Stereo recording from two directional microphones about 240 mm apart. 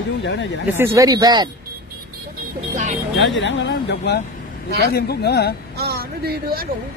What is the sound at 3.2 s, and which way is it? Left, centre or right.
Speech, left.